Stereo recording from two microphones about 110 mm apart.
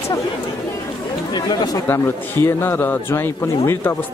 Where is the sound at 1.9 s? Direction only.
20° left (ahead or behind).